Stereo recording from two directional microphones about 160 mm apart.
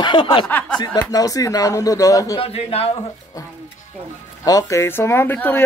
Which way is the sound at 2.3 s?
40° left (ahead or behind).